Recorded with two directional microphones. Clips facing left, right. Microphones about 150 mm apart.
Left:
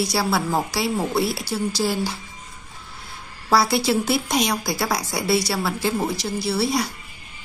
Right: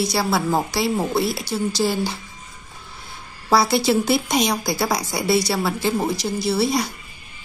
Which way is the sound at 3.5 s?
5° left (ahead or behind).